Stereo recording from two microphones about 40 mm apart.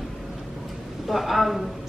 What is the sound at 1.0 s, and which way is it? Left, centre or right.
Speech, centre.